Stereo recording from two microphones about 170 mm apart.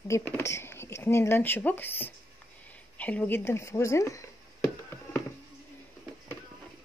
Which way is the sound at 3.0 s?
10° left (ahead or behind).